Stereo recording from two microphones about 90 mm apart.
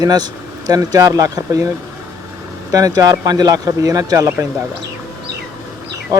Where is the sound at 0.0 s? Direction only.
45° right (ahead or behind).